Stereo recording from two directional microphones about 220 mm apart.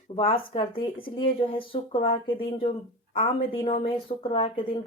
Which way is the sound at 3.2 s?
25° left (ahead or behind).